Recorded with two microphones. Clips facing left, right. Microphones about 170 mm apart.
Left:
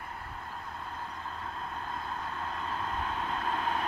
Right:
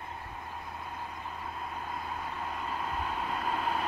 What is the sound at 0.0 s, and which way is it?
Vehicle, 20° right (ahead or behind).